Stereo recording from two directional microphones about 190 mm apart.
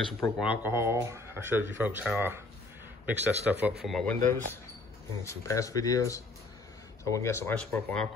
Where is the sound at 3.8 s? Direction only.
5° left (ahead or behind).